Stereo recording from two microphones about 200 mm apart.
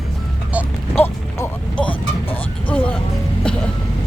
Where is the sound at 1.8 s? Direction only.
25° left (ahead or behind).